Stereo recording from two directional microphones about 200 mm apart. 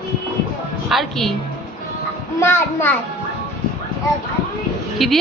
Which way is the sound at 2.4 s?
10° left (ahead or behind).